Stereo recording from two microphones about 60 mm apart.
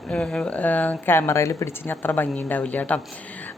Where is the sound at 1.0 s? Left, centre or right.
Left.